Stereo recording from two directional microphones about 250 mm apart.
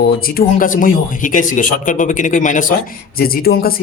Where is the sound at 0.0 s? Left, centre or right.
Left.